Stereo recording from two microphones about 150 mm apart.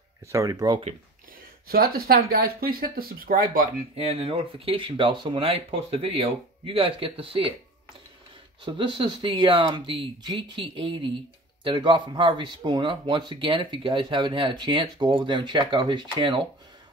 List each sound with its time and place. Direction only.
0.3 s speech: 25° right (ahead or behind)
1.7 s speech: 85° right
3.9 s speech: 40° right (ahead or behind)
8.6 s speech: 35° right (ahead or behind)